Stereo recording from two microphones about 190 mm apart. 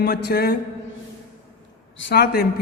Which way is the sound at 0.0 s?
55° left (ahead or behind).